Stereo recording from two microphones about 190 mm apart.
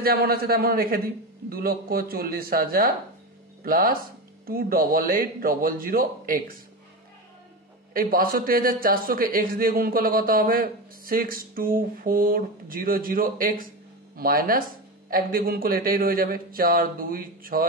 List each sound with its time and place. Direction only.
0.0 s a man's voice: 50° right (ahead or behind)
7.9 s a man's voice: 50° right (ahead or behind)